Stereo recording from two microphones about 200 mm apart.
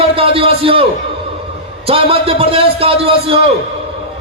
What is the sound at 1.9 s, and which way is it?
A man's voice, 25° right (ahead or behind).